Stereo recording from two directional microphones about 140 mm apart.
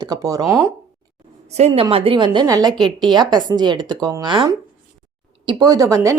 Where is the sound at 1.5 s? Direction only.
50° right (ahead or behind).